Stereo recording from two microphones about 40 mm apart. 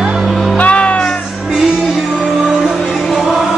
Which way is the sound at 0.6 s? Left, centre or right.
Left.